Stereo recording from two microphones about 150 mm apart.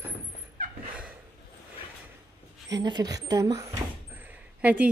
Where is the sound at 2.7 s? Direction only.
25° right (ahead or behind).